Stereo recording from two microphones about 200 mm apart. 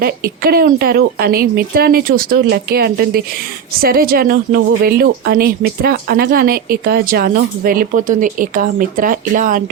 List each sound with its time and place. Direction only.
0.0 s speech: 50° right (ahead or behind)